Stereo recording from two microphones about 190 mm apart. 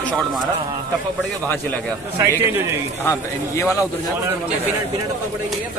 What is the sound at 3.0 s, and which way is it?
Speech, 15° left (ahead or behind).